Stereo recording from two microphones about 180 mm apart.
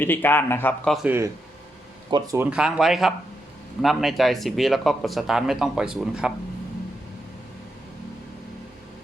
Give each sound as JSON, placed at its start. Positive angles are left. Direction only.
{"t": 0.0, "sound": "speech", "side_deg": 10}
{"t": 1.0, "sound": "speech", "side_deg": -10}
{"t": 2.5, "sound": "speech", "side_deg": -5}